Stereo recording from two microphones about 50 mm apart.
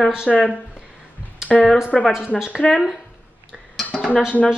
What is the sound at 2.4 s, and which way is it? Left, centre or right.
Speech, centre.